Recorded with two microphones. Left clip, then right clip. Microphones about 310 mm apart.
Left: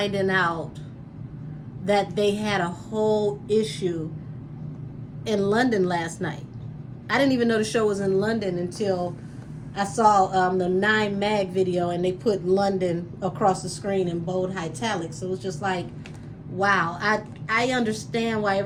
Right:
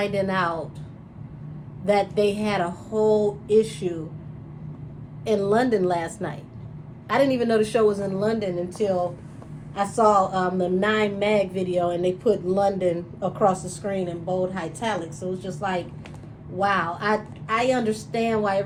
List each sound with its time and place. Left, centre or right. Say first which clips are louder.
0.0 s speech: left 1 dB; centre
1.8 s speech: right 1 dB; centre
5.2 s speech: right 1 dB; centre